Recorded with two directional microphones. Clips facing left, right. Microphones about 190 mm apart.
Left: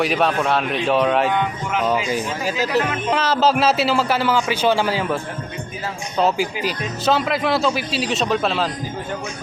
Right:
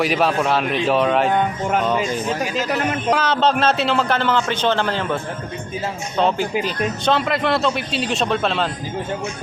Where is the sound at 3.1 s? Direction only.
5° left (ahead or behind).